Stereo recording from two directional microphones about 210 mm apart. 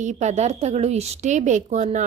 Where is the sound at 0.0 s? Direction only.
35° right (ahead or behind).